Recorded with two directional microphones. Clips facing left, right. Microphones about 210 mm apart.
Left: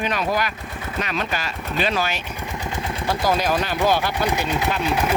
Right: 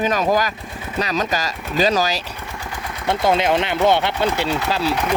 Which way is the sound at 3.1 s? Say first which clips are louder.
Right 4 dB; 25° right (ahead or behind).